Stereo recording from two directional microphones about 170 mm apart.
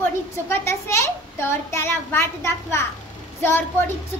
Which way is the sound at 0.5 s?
15° left (ahead or behind).